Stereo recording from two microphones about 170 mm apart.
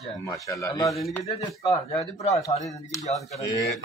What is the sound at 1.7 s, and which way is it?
Speech, 40° left (ahead or behind).